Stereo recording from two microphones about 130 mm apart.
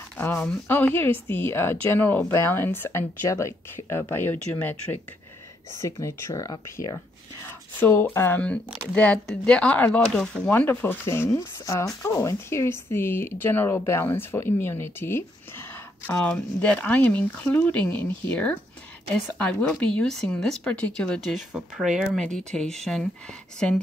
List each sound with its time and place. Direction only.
0.2 s speech: 15° left (ahead or behind)
5.8 s speech: 25° left (ahead or behind)
7.8 s a woman's voice: 15° left (ahead or behind)